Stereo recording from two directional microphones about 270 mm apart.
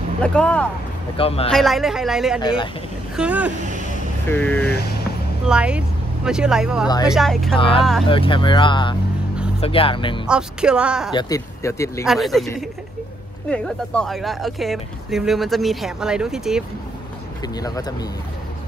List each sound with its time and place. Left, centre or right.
0.2 s speech: centre
1.1 s speech: left
1.5 s speech: centre
2.4 s speech: centre
3.2 s speech: centre
4.3 s speech: centre
5.5 s speech: centre
7.5 s speech: centre
10.2 s speech: centre
11.1 s speech: centre
12.1 s speech: centre
13.5 s speech: centre
17.4 s speech: centre